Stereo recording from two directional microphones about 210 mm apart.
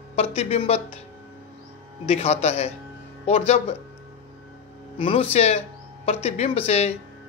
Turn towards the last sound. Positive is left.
turn(degrees=30)  # may be behind; listen again after turning